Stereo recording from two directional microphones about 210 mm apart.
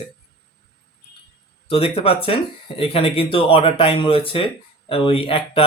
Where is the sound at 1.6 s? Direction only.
25° left (ahead or behind).